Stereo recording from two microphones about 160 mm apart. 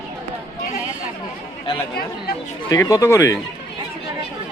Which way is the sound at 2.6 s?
20° left (ahead or behind).